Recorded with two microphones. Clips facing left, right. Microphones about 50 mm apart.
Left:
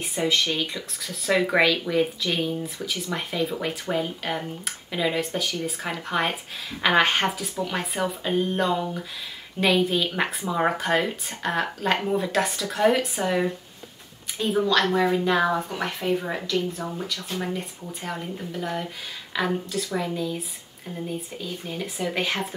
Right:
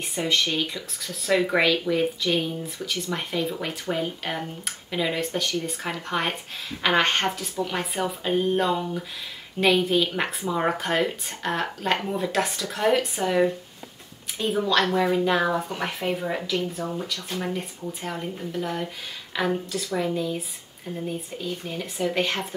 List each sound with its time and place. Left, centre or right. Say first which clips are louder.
0.0 s speech: left 1 dB; centre
16.8 s speech: right 1 dB; centre